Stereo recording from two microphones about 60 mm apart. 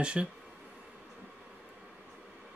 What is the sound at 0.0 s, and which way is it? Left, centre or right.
Speech, centre.